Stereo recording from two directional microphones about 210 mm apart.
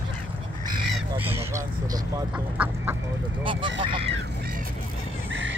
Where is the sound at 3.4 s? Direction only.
25° right (ahead or behind).